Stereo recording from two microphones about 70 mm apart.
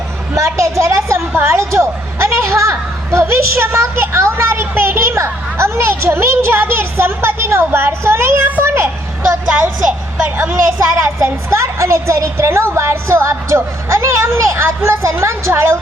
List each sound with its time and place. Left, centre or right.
0.3 s a woman's voice: right
10.3 s a woman's voice: right
10.8 s a woman's voice: right